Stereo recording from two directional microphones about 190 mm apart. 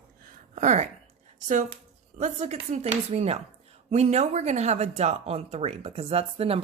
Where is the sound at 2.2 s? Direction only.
35° right (ahead or behind).